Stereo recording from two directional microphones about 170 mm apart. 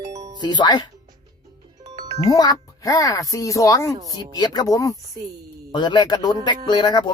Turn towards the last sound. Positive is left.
turn(degrees=25)  # may be behind; listen again after turning